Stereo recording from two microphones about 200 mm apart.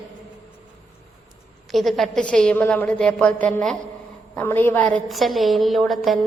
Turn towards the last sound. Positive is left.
turn(degrees=0)  # may be behind; listen again after turning